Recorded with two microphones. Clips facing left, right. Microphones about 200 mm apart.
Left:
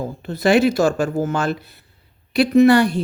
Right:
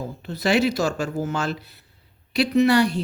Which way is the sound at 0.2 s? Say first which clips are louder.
Left 5 dB; 50° left (ahead or behind).